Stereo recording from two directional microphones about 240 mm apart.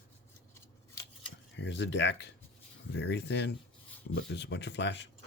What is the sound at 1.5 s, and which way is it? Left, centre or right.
Speech, left.